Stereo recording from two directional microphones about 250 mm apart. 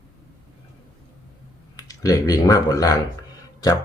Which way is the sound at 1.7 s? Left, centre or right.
Centre.